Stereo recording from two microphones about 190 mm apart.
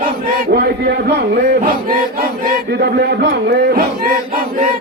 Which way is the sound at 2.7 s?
60° right (ahead or behind).